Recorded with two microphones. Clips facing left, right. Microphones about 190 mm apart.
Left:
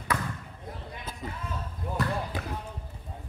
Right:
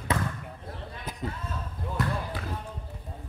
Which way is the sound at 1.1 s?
15° right (ahead or behind).